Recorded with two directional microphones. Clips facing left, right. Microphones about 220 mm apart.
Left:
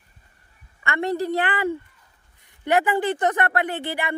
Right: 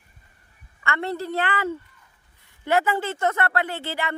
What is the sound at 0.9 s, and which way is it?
Speech, 15° left (ahead or behind).